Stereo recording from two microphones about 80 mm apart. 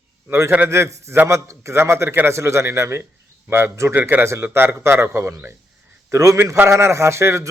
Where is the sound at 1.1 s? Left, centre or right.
Right.